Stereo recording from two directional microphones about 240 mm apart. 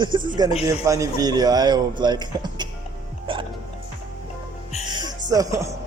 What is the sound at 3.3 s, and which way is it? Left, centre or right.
Music, right.